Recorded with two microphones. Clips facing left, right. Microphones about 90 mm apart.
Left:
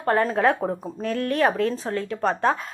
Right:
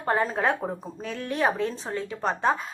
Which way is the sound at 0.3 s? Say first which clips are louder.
Left 5 dB; centre (ahead or behind).